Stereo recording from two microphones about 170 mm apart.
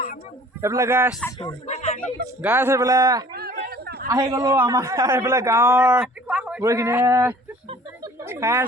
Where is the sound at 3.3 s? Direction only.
65° right (ahead or behind).